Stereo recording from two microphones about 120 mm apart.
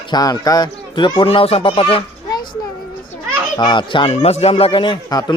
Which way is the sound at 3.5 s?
40° left (ahead or behind).